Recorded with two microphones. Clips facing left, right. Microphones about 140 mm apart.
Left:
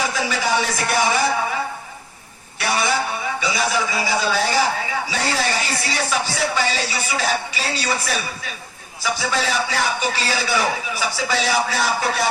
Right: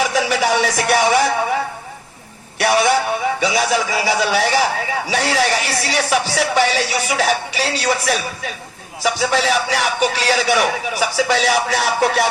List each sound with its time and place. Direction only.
0.1 s speech: 75° right (ahead or behind)
2.6 s speech: 70° right (ahead or behind)